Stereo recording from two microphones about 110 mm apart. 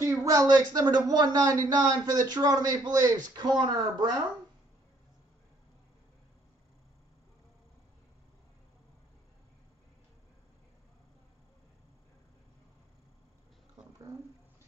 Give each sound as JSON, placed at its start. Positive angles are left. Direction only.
{"t": 0.0, "sound": "speech", "side_deg": -30}